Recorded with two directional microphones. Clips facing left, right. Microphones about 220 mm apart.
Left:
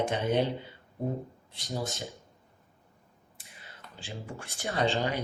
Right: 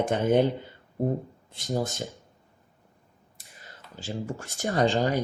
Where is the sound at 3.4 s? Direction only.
40° right (ahead or behind).